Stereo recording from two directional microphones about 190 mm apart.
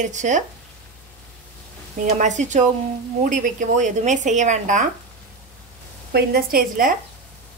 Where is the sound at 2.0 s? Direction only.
40° right (ahead or behind).